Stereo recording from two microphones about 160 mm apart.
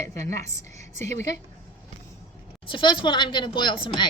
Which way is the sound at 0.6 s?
45° right (ahead or behind).